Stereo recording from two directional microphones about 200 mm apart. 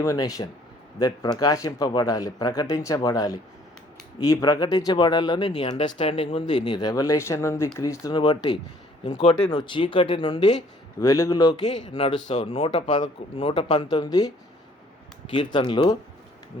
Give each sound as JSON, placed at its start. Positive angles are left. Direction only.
{"t": 0.0, "sound": "speech", "side_deg": 15}